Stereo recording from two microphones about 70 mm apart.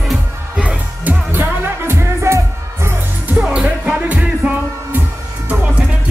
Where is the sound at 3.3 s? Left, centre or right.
Centre.